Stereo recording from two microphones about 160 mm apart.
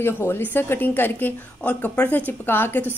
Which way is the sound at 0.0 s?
15° left (ahead or behind).